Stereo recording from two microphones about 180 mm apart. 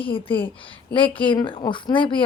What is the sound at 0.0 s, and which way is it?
A woman's voice, 30° left (ahead or behind).